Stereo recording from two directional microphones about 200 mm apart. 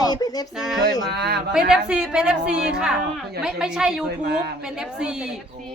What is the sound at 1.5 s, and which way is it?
A woman's voice, 5° right (ahead or behind).